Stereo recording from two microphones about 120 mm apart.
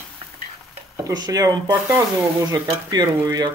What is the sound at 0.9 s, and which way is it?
Speech, 35° right (ahead or behind).